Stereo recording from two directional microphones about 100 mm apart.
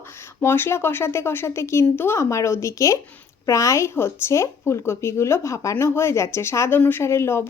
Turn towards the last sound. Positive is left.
turn(degrees=25)  # may be behind; listen again after turning